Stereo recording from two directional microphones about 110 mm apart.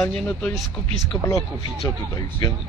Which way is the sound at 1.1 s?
25° left (ahead or behind).